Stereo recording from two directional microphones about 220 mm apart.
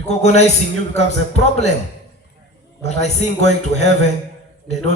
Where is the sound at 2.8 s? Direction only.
30° left (ahead or behind).